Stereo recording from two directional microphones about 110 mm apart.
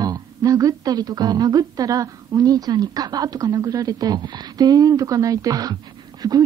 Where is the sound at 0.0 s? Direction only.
30° right (ahead or behind).